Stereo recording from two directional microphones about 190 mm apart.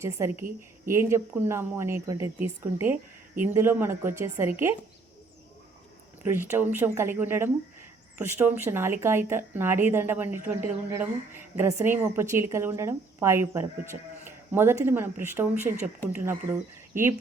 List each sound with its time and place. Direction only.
0.0 s speech: 15° right (ahead or behind)
6.2 s speech: 10° right (ahead or behind)